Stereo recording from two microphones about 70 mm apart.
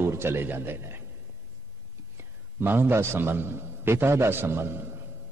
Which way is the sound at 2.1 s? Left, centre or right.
Right.